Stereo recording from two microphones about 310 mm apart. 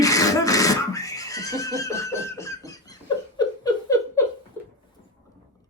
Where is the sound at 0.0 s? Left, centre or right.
Centre.